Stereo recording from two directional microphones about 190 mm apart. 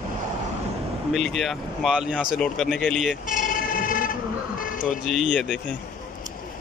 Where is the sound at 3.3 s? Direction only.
45° left (ahead or behind).